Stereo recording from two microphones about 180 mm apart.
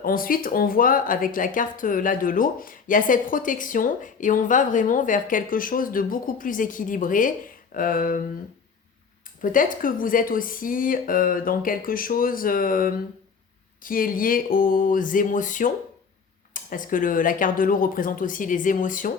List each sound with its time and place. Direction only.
0.0 s speech: 55° left (ahead or behind)
9.4 s speech: 50° left (ahead or behind)